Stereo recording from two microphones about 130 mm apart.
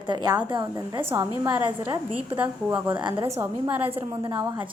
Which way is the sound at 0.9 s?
20° right (ahead or behind).